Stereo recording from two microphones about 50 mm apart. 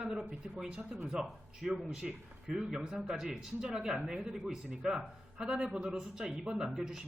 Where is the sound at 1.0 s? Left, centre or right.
Centre.